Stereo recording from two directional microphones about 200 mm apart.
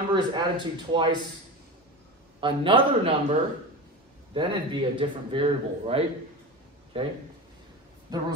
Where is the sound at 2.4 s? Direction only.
25° right (ahead or behind).